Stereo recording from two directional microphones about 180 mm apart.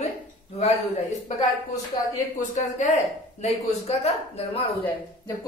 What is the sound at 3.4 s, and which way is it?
A man's voice, 35° left (ahead or behind).